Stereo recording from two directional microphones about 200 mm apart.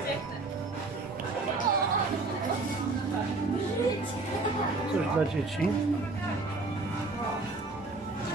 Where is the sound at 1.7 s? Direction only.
45° right (ahead or behind).